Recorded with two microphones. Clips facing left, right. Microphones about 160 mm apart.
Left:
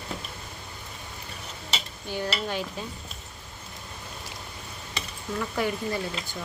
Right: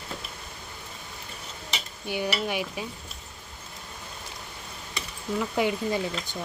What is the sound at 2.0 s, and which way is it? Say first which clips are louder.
Dishes: right 2 dB; 15° right (ahead or behind).